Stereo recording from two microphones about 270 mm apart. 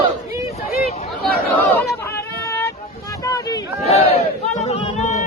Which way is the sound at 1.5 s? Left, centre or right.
Centre.